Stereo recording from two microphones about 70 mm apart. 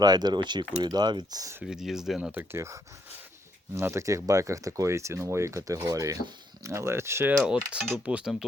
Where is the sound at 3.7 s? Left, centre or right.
Right.